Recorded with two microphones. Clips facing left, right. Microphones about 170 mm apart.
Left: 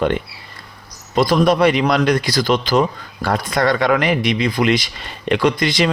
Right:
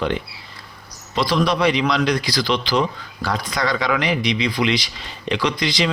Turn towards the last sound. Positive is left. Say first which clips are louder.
# left 5 dB
turn(degrees=50)  # may be behind; listen again after turning